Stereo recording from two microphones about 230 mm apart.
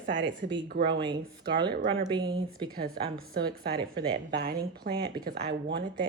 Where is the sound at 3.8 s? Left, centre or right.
Centre.